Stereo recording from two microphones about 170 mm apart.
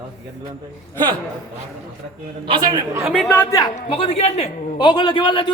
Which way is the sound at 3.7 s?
35° left (ahead or behind).